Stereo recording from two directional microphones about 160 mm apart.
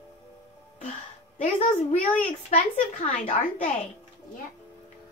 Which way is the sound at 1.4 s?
45° left (ahead or behind).